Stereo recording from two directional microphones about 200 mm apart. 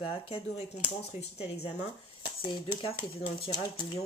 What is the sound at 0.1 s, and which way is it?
Speech, 30° left (ahead or behind).